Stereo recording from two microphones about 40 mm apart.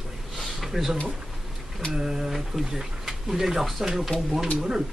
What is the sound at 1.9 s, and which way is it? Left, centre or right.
Speech, centre.